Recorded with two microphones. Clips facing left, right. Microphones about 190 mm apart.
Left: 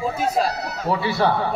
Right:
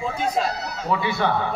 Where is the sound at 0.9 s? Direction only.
35° left (ahead or behind).